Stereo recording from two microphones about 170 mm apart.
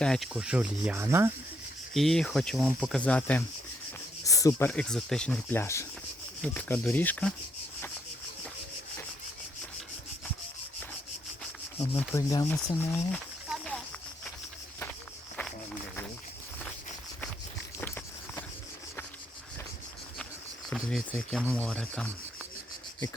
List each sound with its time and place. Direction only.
0.0 s speech: centre (ahead or behind); by 1.3 s 15° right (ahead or behind)
1.9 s speech: centre (ahead or behind)
4.2 s speech: 20° left (ahead or behind)
11.8 s speech: 10° left (ahead or behind)
12.3 s speech: 20° left (ahead or behind)
13.5 s a sound: 5° left (ahead or behind)
17.7 s a sound: 10° left (ahead or behind)
20.7 s cricket: 5° left (ahead or behind)
21.3 s speech: 10° left (ahead or behind)